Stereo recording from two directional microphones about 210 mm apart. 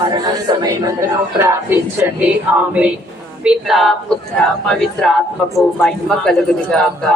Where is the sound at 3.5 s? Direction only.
Centre (ahead or behind).